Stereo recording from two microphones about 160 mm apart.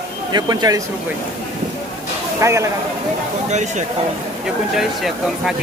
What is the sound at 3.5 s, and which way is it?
Speech, 45° right (ahead or behind).